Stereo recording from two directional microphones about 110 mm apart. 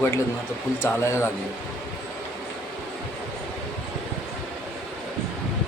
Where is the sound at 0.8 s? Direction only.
25° left (ahead or behind).